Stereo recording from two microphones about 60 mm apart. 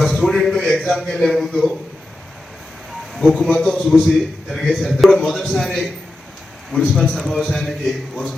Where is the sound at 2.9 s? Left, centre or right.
Centre.